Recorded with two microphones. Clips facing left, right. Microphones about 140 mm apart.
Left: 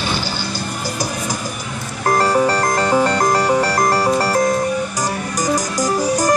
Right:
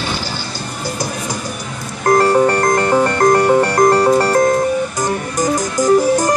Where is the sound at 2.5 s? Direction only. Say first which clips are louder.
Right 3 dB; 50° right (ahead or behind).